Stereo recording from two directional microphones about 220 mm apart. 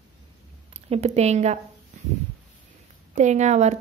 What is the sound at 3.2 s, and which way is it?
Speech, 30° right (ahead or behind).